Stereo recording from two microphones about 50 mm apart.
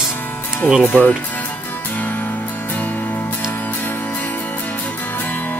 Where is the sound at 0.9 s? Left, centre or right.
Left.